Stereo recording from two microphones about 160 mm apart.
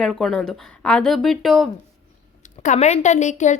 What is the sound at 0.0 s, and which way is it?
A woman's voice, 5° left (ahead or behind).